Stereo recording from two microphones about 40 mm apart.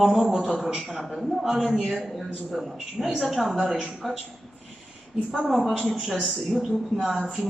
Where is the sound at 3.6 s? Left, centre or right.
Centre.